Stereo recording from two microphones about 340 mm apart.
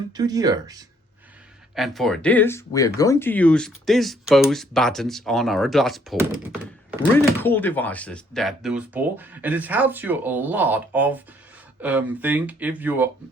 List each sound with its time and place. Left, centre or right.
0.1 s speech: centre
1.7 s speech: centre